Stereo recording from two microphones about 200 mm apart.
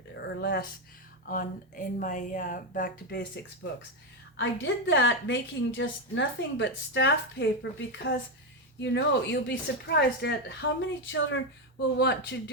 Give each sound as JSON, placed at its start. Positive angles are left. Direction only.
{"t": 0.2, "sound": "speech", "side_deg": 55}
{"t": 1.3, "sound": "speech", "side_deg": 45}
{"t": 4.4, "sound": "a woman's voice", "side_deg": 65}
{"t": 10.8, "sound": "speech", "side_deg": 70}
{"t": 11.9, "sound": "a woman's voice", "side_deg": 60}